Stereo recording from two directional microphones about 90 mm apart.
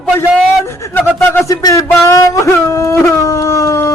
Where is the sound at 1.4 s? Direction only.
35° left (ahead or behind).